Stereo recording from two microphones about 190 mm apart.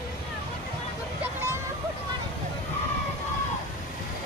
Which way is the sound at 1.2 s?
15° right (ahead or behind).